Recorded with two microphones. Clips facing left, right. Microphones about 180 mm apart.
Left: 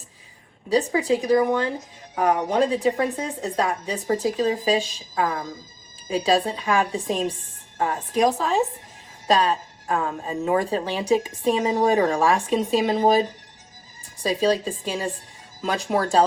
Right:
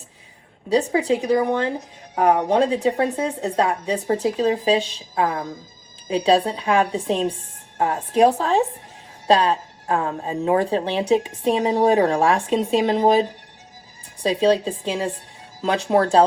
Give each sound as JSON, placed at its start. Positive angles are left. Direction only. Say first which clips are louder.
{"t": 0.7, "sound": "a woman's voice", "louder": "right 2 dB", "side_deg": -30}